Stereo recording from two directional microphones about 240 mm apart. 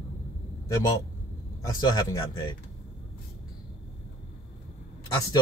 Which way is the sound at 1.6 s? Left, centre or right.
Centre.